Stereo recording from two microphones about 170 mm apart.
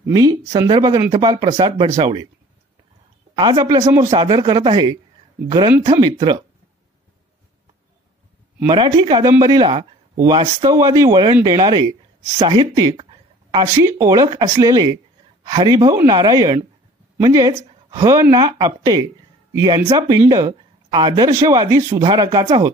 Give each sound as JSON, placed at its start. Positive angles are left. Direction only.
{"t": 0.0, "sound": "speech", "side_deg": -25}
{"t": 3.3, "sound": "speech", "side_deg": -25}
{"t": 8.6, "sound": "speech", "side_deg": -30}